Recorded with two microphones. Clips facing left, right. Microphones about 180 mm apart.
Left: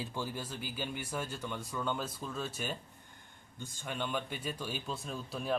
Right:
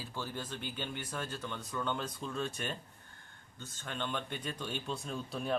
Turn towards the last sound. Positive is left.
turn(degrees=0)  # may be behind; listen again after turning